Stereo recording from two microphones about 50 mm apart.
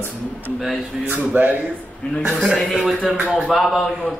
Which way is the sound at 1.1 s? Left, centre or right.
Right.